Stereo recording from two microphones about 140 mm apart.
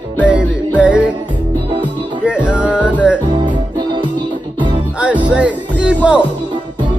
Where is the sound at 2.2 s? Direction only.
10° right (ahead or behind).